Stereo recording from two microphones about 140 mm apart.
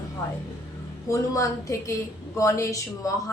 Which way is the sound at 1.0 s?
25° left (ahead or behind).